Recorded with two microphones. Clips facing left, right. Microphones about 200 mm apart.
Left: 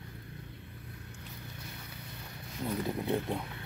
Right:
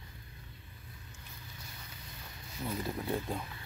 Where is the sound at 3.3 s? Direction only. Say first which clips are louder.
Left 2 dB; 65° left (ahead or behind).